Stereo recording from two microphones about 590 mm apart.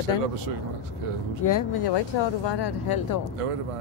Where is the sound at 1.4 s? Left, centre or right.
Left.